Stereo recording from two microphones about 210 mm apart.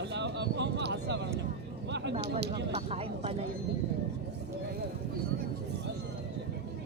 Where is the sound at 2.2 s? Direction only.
55° right (ahead or behind).